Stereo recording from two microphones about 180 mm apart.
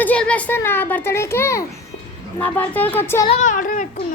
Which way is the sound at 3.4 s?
45° left (ahead or behind).